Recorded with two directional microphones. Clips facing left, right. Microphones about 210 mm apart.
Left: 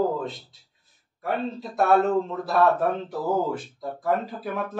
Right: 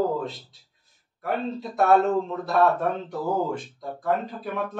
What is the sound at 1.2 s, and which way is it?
Speech, centre (ahead or behind).